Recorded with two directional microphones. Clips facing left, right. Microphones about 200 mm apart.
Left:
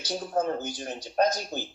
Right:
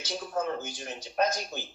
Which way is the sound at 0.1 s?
40° left (ahead or behind).